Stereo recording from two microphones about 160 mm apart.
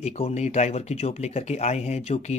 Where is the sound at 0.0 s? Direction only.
40° left (ahead or behind).